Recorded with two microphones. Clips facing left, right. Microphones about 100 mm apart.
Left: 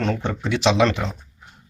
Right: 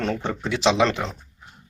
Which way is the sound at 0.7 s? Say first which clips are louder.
Left 2 dB; 25° right (ahead or behind).